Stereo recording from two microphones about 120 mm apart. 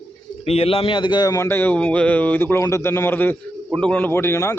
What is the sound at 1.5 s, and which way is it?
A man's voice, 15° left (ahead or behind).